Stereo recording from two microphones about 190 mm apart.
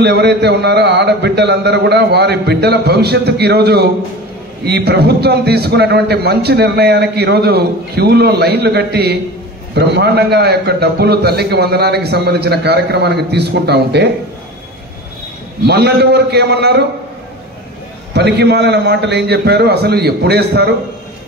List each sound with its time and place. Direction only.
0.0 s a man's voice: 60° right (ahead or behind)
15.6 s a man's voice: 60° right (ahead or behind)
18.1 s a man's voice: 60° right (ahead or behind)